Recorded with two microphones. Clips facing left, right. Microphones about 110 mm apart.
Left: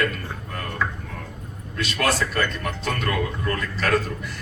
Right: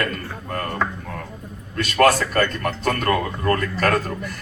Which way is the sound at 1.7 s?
50° right (ahead or behind).